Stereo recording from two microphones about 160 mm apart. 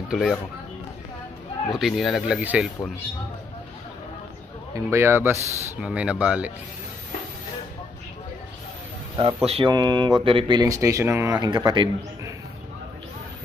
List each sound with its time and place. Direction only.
0.1 s speech: centre (ahead or behind)
1.7 s speech: centre (ahead or behind)
4.9 s speech: 15° right (ahead or behind)
9.1 s speech: 35° right (ahead or behind)